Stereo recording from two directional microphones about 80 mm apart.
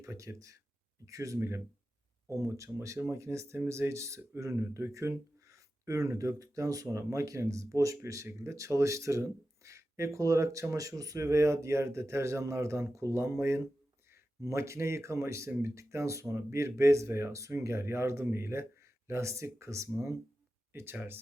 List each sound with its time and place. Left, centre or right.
0.0 s speech: right
20.7 s speech: right